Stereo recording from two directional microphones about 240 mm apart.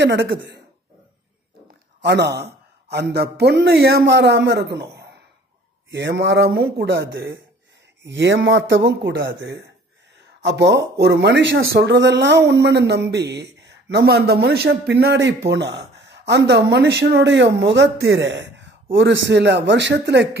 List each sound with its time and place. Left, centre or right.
0.0 s a man's voice: right
2.0 s a man's voice: right
5.9 s a man's voice: right